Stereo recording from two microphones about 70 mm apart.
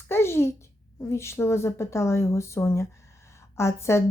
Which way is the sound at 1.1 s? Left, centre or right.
Left.